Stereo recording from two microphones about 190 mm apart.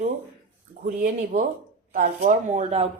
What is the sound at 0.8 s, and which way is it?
Speech, 40° right (ahead or behind).